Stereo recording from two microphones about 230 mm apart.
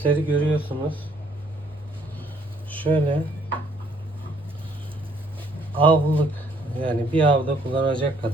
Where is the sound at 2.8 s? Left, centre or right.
Right.